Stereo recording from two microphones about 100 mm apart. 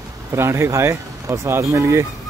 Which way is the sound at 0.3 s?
25° right (ahead or behind).